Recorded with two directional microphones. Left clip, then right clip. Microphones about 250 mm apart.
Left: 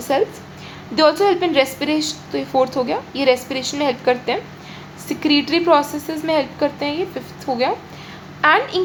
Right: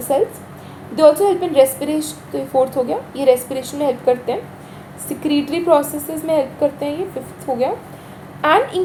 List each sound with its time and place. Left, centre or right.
0.1 s a woman's voice: centre
7.5 s a woman's voice: left
8.4 s a woman's voice: centre